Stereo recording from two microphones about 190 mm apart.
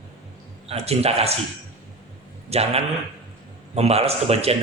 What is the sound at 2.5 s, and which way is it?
A man's voice, 35° right (ahead or behind).